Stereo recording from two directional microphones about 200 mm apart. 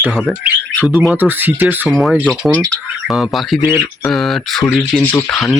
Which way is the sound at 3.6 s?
20° left (ahead or behind).